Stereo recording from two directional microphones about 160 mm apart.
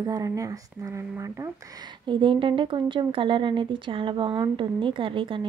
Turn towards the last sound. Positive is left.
turn(degrees=-30)  # may be behind; listen again after turning